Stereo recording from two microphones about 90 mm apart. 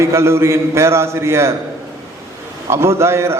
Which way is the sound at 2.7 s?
30° right (ahead or behind).